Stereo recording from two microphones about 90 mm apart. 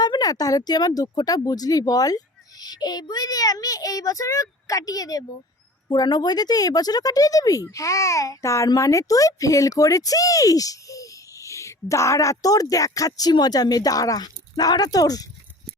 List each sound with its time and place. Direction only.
0.0 s speech: 50° left (ahead or behind)